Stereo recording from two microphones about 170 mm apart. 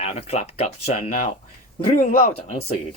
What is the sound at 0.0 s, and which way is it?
Speech, 40° left (ahead or behind).